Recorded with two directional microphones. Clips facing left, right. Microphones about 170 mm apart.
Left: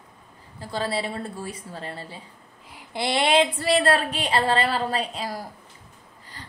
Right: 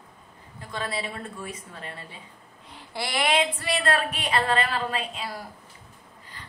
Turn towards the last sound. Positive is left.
turn(degrees=40)  # may be behind; listen again after turning